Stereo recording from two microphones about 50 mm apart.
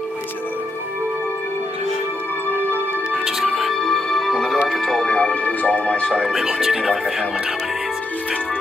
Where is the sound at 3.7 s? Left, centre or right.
Centre.